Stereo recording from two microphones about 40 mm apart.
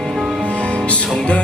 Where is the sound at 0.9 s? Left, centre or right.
Left.